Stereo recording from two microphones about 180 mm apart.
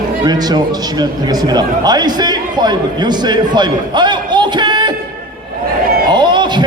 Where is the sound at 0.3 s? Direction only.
20° right (ahead or behind).